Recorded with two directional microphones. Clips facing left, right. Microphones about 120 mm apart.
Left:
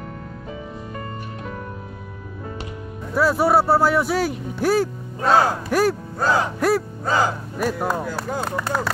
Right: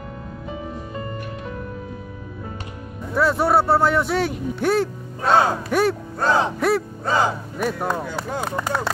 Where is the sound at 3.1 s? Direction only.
5° left (ahead or behind).